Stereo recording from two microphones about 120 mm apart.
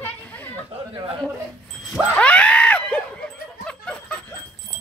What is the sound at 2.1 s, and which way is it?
Screaming, 10° left (ahead or behind).